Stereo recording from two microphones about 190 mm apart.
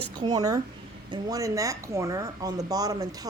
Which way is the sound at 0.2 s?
20° right (ahead or behind).